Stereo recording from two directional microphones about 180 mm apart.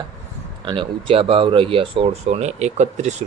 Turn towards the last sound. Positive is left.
turn(degrees=-40)  # may be behind; listen again after turning